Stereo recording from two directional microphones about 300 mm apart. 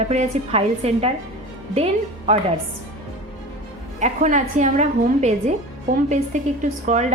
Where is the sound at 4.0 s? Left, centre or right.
Right.